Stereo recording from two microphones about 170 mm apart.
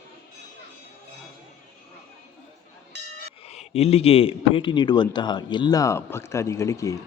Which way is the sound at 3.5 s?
40° left (ahead or behind).